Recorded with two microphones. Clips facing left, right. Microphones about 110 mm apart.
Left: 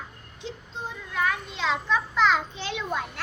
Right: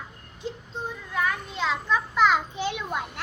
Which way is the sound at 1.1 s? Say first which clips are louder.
Left 1 dB; 5° right (ahead or behind).